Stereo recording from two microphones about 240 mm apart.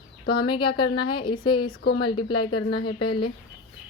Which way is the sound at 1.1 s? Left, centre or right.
Centre.